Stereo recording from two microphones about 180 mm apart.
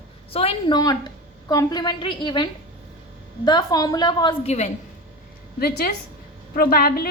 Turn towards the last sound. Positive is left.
turn(degrees=55)  # may be behind; listen again after turning